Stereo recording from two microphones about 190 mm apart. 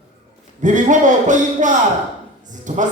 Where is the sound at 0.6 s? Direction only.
40° right (ahead or behind).